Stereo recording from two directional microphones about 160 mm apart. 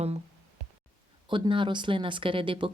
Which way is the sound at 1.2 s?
30° right (ahead or behind).